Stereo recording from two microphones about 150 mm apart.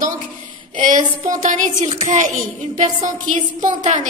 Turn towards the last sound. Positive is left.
turn(degrees=-50)  # may be behind; listen again after turning